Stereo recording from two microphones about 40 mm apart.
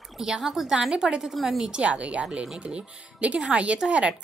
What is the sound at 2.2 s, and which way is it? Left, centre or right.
A woman's voice, right.